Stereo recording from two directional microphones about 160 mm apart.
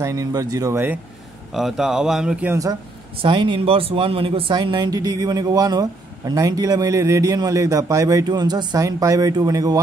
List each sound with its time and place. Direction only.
0.0 s speech: 20° right (ahead or behind)
1.5 s speech: centre (ahead or behind)
2.5 s speech: 20° right (ahead or behind)